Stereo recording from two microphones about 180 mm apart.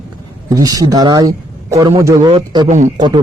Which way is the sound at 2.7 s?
45° right (ahead or behind).